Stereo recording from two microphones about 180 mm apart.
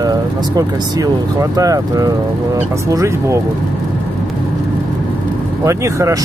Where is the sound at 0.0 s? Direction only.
20° right (ahead or behind).